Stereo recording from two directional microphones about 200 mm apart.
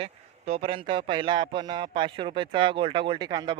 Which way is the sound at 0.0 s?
30° right (ahead or behind).